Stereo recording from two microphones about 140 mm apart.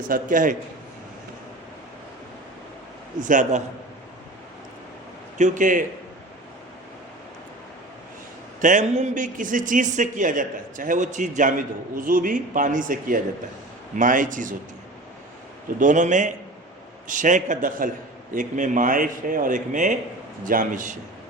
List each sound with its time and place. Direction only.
0.1 s a man's voice: 70° right (ahead or behind)
3.2 s a man's voice: 65° right (ahead or behind)
5.4 s a man's voice: 70° right (ahead or behind)
8.6 s a man's voice: 60° right (ahead or behind)
15.8 s a man's voice: 65° right (ahead or behind)
20.4 s a man's voice: 75° right (ahead or behind)